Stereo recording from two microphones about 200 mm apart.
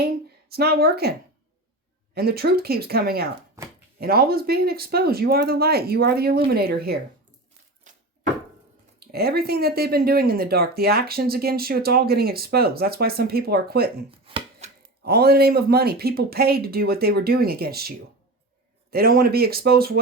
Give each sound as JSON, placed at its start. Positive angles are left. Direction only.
{"t": 0.0, "sound": "speech", "side_deg": -50}
{"t": 2.1, "sound": "speech", "side_deg": -50}
{"t": 3.6, "sound": "a sound", "side_deg": -15}
{"t": 4.0, "sound": "speech", "side_deg": -50}
{"t": 9.0, "sound": "speech", "side_deg": -50}
{"t": 14.1, "sound": "chopping", "side_deg": -25}
{"t": 15.0, "sound": "speech", "side_deg": -50}